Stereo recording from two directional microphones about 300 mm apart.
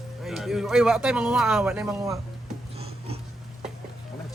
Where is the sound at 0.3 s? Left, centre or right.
Centre.